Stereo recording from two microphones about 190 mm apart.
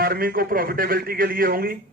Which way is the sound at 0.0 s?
50° right (ahead or behind).